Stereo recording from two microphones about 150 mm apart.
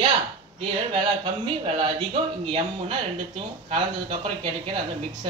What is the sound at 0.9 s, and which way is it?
Speech, 30° right (ahead or behind).